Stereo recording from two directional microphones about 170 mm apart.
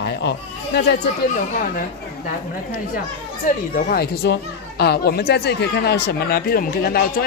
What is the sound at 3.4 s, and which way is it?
Speech, 45° left (ahead or behind).